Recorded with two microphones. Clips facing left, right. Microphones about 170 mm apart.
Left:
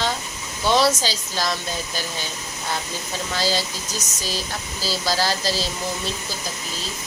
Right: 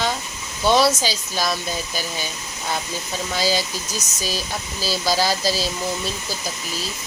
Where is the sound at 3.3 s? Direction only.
15° right (ahead or behind).